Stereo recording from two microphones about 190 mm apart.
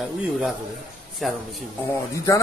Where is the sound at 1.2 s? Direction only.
Centre (ahead or behind).